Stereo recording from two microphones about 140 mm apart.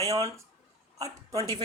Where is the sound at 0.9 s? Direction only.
25° right (ahead or behind).